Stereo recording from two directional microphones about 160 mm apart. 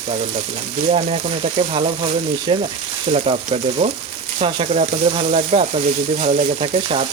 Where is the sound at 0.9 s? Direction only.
40° right (ahead or behind).